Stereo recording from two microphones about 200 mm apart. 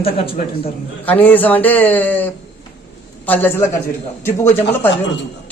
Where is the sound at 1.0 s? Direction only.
10° left (ahead or behind).